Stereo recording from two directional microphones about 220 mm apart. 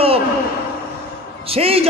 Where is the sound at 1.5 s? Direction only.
25° right (ahead or behind).